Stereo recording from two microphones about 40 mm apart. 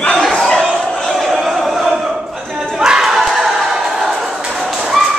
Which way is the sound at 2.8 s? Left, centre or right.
Centre.